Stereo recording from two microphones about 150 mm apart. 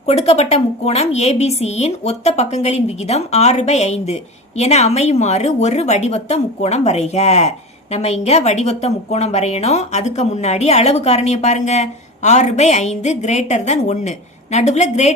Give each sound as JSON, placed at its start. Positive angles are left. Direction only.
{"t": 0.0, "sound": "a woman's voice", "side_deg": 45}